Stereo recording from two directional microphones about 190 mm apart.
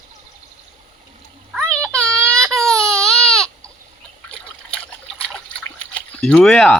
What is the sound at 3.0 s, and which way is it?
Baby cry, 5° left (ahead or behind).